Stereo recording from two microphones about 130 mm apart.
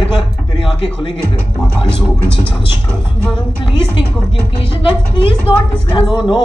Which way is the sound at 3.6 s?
40° left (ahead or behind).